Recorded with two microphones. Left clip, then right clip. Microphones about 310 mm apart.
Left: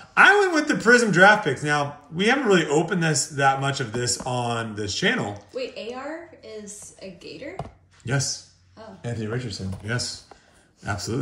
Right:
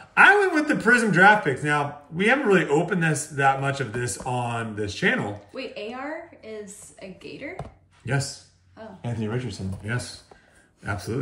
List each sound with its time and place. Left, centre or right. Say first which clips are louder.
0.1 s speech: even; centre
5.3 s speech: left 3 dB; right
7.0 s speech: even; right
7.5 s a sound: left 2 dB; centre
9.3 s a man's voice: left 1 dB; centre